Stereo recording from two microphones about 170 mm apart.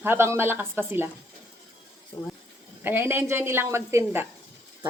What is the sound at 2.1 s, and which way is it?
Speech, 25° left (ahead or behind).